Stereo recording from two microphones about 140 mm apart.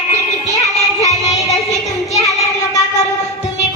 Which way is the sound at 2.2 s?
25° left (ahead or behind).